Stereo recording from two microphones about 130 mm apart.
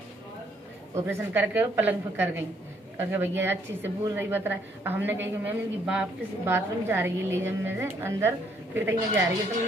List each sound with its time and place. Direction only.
0.9 s a woman's voice: 15° right (ahead or behind)